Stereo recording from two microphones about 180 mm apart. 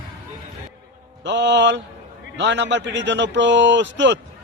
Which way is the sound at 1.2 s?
75° right (ahead or behind).